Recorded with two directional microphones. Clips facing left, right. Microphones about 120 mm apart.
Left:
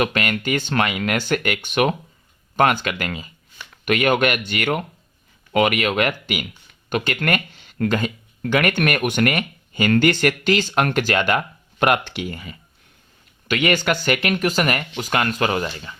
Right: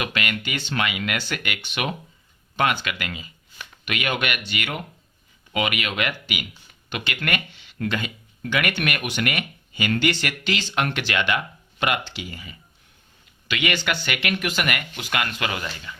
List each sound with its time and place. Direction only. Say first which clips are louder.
0.0 s speech: left 6 dB; 45° left (ahead or behind)